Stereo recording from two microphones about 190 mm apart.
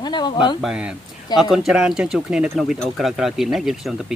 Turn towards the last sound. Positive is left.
turn(degrees=0)  # may be behind; listen again after turning